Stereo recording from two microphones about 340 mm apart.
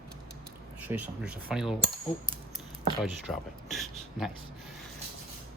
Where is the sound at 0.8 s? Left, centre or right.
Centre.